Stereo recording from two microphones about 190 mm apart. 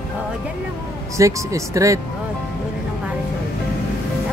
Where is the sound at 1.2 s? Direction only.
15° right (ahead or behind).